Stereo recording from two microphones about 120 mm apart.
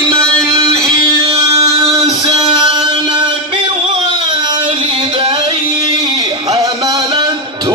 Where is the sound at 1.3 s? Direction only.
55° right (ahead or behind).